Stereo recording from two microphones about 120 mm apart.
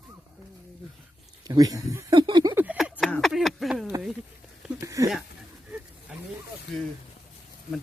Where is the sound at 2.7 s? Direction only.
5° right (ahead or behind).